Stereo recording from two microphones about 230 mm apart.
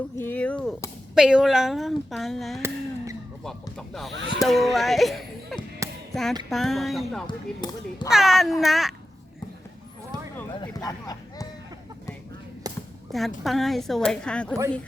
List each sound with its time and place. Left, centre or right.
0.2 s speech: centre
2.6 s a sound: centre
3.4 s speech: centre
5.8 s a sound: centre
6.5 s speech: centre
7.3 s speech: centre
8.1 s speech: centre
10.6 s speech: centre
12.7 s a sound: centre
13.1 s speech: centre